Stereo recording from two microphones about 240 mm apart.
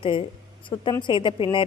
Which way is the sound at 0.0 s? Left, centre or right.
Left.